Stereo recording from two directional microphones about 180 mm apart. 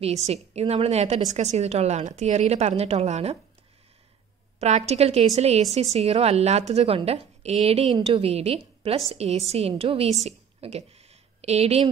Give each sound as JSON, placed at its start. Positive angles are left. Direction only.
{"t": 0.0, "sound": "a woman's voice", "side_deg": -35}
{"t": 4.6, "sound": "a woman's voice", "side_deg": -35}